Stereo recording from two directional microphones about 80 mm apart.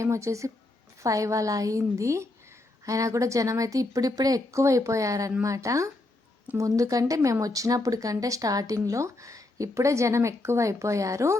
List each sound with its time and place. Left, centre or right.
0.0 s speech: right